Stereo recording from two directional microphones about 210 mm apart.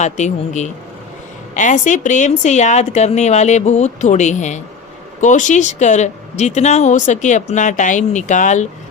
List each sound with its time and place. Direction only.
0.0 s speech: 35° left (ahead or behind)